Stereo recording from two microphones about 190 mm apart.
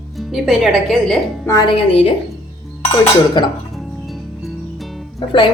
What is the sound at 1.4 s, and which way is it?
A woman's voice, 20° left (ahead or behind).